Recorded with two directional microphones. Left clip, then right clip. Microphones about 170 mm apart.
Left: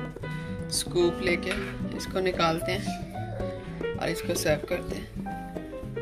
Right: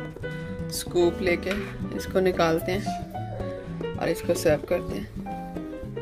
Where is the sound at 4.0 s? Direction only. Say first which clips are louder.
Right 6 dB; 50° right (ahead or behind).